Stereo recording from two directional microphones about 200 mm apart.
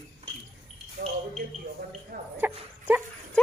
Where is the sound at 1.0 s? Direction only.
40° right (ahead or behind).